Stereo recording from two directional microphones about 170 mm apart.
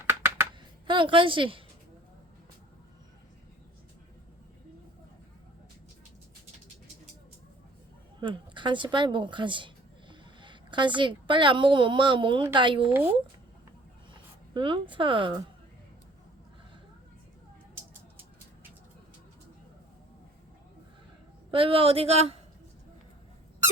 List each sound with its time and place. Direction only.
0.0 s a sound: 15° right (ahead or behind)
0.9 s a woman's voice: 30° right (ahead or behind)
8.2 s speech: 30° right (ahead or behind)
12.9 s speech: 10° right (ahead or behind)
14.1 s speech: 30° right (ahead or behind)
21.5 s speech: 30° right (ahead or behind)